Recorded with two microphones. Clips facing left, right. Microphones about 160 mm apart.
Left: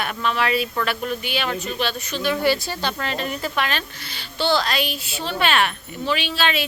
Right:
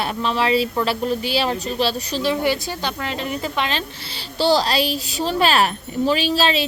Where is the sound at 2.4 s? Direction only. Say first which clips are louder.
Even; 15° right (ahead or behind).